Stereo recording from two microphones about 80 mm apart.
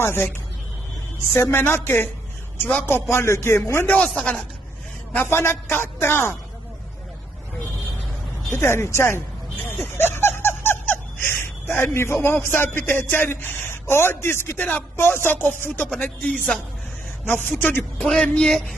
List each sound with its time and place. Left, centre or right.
0.0 s a man's voice: left
1.3 s a man's voice: left
3.9 s speech: centre
5.1 s a man's voice: left
8.5 s a man's voice: left
9.7 s a sound: left
14.7 s a man's voice: left
16.3 s speech: centre
17.3 s a man's voice: left
18.0 s speech: centre